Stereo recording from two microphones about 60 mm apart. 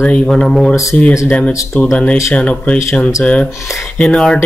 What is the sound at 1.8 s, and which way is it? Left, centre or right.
Speech, left.